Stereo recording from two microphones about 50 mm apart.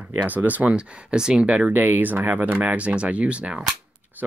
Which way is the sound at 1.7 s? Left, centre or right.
Right.